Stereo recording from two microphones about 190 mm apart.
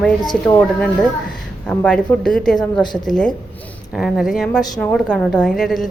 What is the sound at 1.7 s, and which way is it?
A woman's voice, 5° left (ahead or behind).